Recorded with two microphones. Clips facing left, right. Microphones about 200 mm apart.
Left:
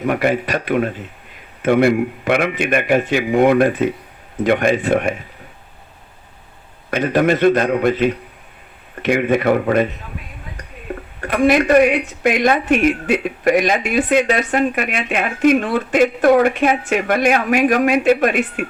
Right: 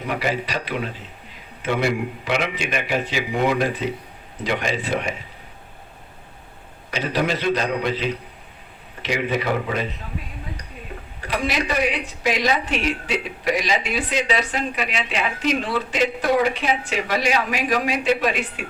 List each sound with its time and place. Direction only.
0.0 s speech: 50° left (ahead or behind)
6.9 s speech: 50° left (ahead or behind)
11.2 s speech: 50° left (ahead or behind)